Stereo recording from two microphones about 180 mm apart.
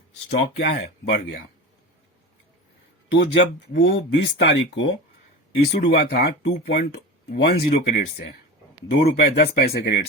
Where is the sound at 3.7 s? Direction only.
90° left.